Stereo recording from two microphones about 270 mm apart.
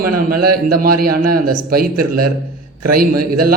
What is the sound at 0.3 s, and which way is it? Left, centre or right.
A man's voice, right.